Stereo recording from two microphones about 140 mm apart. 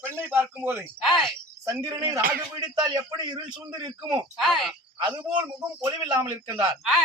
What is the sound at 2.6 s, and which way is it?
A man's voice, 30° right (ahead or behind).